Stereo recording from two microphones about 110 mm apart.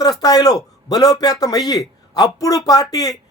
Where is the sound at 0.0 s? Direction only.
35° left (ahead or behind).